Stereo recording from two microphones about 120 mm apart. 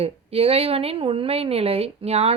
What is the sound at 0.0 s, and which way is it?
A woman's voice, 55° right (ahead or behind).